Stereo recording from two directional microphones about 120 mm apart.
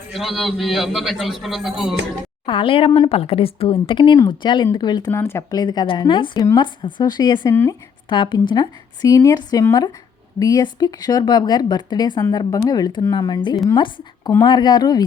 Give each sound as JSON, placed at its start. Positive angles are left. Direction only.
{"t": 0.3, "sound": "a man's voice", "side_deg": 0}
{"t": 2.5, "sound": "a woman's voice", "side_deg": 45}
{"t": 5.1, "sound": "speech", "side_deg": 20}
{"t": 5.5, "sound": "speech", "side_deg": 35}
{"t": 7.5, "sound": "speech", "side_deg": 20}
{"t": 8.1, "sound": "speech", "side_deg": 40}